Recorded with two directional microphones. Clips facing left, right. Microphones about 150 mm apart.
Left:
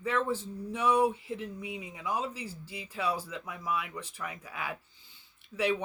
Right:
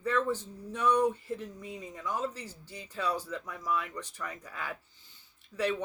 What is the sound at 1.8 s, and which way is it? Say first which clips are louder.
Speech: right 1 dB; 10° left (ahead or behind).